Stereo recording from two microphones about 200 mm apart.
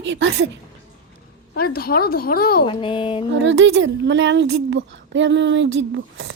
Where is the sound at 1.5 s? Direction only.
50° left (ahead or behind).